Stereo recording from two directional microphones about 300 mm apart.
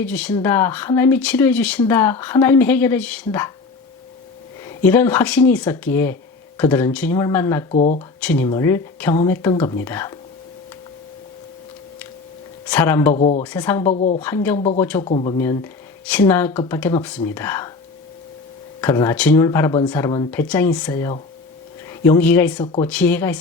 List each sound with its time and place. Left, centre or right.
0.0 s speech: centre
4.6 s speech: centre
7.7 s speech: left
8.2 s speech: centre
12.6 s speech: centre
13.1 s speech: centre
13.4 s speech: centre
13.8 s speech: left
14.2 s speech: centre
15.1 s speech: centre
18.8 s speech: centre
22.6 s speech: centre
22.9 s speech: centre